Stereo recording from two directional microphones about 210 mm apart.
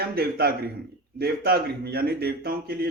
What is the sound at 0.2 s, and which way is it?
Speech, 45° right (ahead or behind).